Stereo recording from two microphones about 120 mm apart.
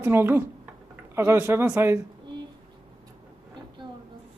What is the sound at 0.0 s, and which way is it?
Speech, 20° right (ahead or behind).